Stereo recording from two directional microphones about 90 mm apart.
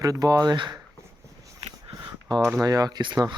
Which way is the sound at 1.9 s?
50° right (ahead or behind).